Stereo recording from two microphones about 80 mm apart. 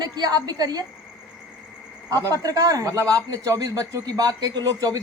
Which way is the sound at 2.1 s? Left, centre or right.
Right.